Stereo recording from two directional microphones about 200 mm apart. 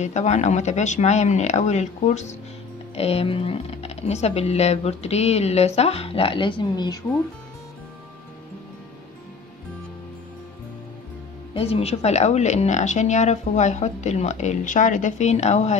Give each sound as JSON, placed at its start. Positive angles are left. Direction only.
{"t": 0.0, "sound": "speech", "side_deg": 35}
{"t": 11.5, "sound": "speech", "side_deg": 30}